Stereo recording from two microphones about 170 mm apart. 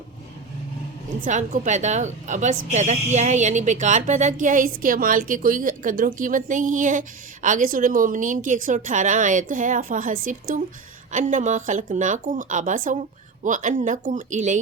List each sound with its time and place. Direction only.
1.2 s a woman's voice: 45° right (ahead or behind)